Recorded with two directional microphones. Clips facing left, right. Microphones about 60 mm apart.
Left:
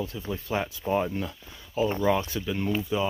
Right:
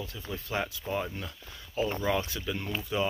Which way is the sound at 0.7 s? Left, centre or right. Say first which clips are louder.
Left 7 dB; left.